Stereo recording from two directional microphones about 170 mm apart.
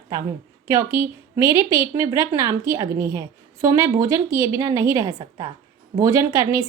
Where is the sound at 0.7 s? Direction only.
15° right (ahead or behind).